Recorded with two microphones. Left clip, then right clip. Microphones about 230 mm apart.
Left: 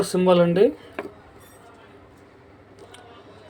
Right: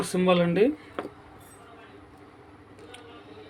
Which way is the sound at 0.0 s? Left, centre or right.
Centre.